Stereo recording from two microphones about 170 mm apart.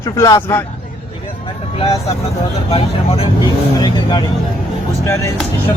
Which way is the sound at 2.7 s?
35° left (ahead or behind).